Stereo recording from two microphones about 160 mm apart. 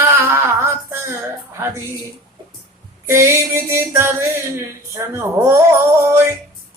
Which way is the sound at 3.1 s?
15° right (ahead or behind).